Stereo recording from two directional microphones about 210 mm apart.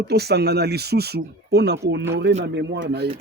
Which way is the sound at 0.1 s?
50° right (ahead or behind).